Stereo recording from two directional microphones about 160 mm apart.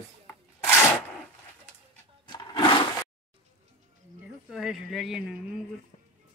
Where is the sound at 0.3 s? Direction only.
15° left (ahead or behind).